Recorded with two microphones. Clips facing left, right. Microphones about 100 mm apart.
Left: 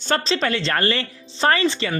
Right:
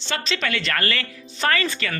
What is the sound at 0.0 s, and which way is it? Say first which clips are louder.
Speech: left 5 dB; 40° left (ahead or behind).